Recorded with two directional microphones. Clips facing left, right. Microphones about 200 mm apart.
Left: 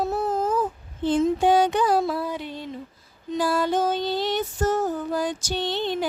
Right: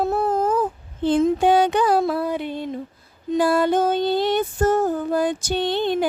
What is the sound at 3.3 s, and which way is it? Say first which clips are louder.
Female singing: right 5 dB; 60° right (ahead or behind).